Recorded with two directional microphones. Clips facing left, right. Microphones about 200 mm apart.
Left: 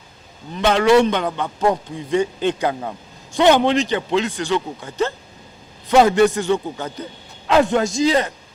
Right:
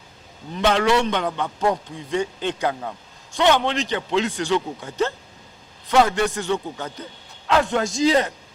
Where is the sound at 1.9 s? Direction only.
5° left (ahead or behind).